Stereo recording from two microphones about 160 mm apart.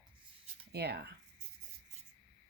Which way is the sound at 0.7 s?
90° right.